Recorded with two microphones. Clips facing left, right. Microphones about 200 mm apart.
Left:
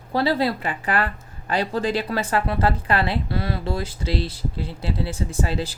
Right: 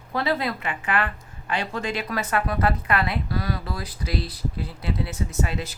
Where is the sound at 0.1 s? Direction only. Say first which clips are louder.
Left 4 dB; 30° left (ahead or behind).